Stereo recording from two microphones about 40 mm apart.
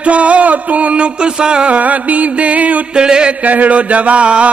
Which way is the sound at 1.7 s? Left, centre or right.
Right.